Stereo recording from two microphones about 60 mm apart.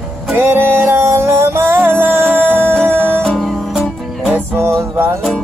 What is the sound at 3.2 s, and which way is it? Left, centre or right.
Music, centre.